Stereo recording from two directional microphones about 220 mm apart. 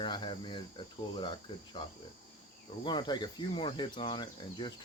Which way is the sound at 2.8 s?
20° left (ahead or behind).